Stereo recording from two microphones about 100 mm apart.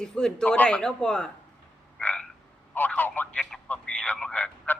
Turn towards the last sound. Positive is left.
turn(degrees=15)  # may be behind; listen again after turning